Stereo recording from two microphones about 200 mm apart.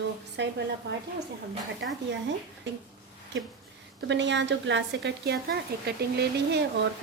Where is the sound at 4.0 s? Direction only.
60° right (ahead or behind).